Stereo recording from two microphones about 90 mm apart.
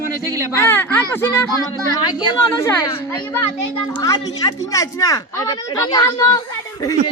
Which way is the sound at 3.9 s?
45° left (ahead or behind).